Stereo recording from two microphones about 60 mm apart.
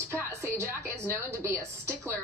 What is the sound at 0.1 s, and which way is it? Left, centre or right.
A woman's voice, right.